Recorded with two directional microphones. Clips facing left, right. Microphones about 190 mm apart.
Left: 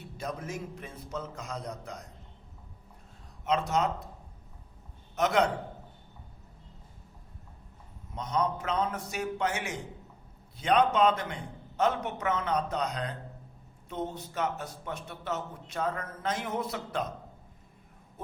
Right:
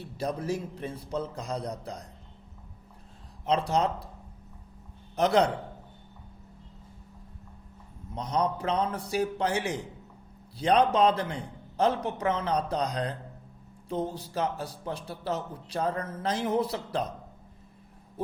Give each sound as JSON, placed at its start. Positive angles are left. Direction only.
{"t": 0.0, "sound": "a man's voice", "side_deg": -35}
{"t": 3.4, "sound": "a man's voice", "side_deg": -35}
{"t": 5.1, "sound": "a man's voice", "side_deg": -35}
{"t": 8.1, "sound": "a man's voice", "side_deg": -35}